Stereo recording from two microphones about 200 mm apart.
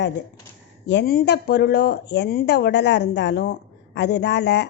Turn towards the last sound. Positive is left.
turn(degrees=60)  # may be behind; listen again after turning